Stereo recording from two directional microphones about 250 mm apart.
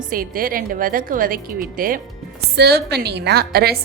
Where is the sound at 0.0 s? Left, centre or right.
Right.